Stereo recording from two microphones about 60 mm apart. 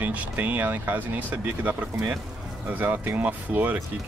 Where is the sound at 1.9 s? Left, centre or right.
Centre.